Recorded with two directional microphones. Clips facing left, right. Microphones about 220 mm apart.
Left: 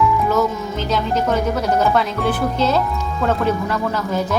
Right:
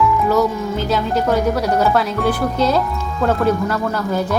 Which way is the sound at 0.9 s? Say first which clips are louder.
Right 1 dB; centre (ahead or behind).